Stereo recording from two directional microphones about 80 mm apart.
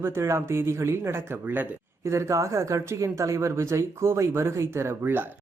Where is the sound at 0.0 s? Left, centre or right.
Right.